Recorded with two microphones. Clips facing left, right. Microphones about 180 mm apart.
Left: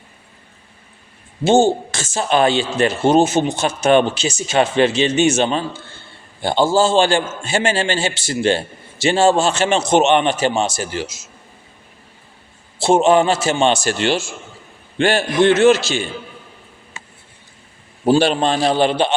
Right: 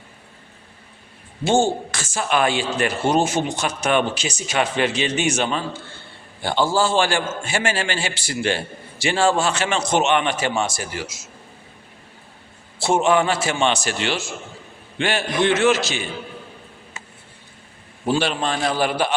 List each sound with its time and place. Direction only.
1.5 s a man's voice: 25° left (ahead or behind)
12.8 s a man's voice: 25° left (ahead or behind)
15.5 s a man's voice: 25° left (ahead or behind)
18.0 s a man's voice: 30° left (ahead or behind)